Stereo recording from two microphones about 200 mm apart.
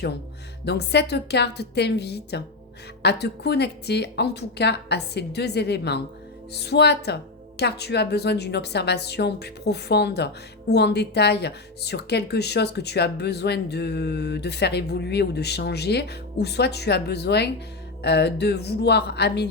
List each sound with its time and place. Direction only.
0.6 s speech: 55° left (ahead or behind)